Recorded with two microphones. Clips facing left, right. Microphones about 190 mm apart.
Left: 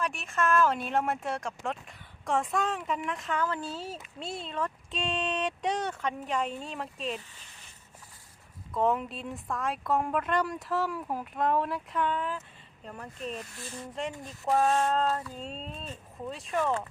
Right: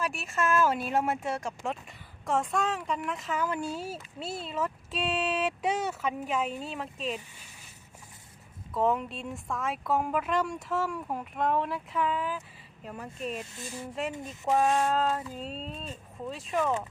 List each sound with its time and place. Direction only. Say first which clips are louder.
0.0 s speech: even; 5° right (ahead or behind)
8.7 s speech: even; centre (ahead or behind)
13.4 s speech: right 2 dB; 20° right (ahead or behind)
13.7 s speech: right 1 dB; 5° right (ahead or behind)
14.1 s speech: even; 20° right (ahead or behind); by 16.7 s centre (ahead or behind)